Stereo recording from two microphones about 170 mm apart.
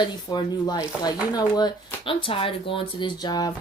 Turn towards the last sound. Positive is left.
turn(degrees=25)  # may be behind; listen again after turning